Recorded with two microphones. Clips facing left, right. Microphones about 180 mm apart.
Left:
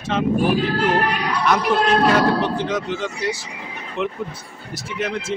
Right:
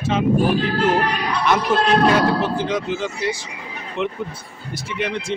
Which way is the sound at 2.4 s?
5° right (ahead or behind).